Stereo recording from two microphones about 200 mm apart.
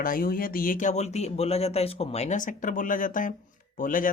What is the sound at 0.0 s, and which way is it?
Speech, 45° left (ahead or behind).